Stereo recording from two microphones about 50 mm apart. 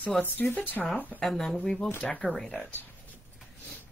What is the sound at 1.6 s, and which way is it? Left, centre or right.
Speech, centre.